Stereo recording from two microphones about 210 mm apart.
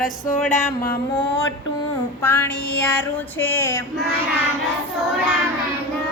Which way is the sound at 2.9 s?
10° left (ahead or behind).